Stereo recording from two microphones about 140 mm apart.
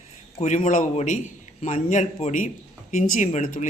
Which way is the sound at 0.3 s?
55° left (ahead or behind).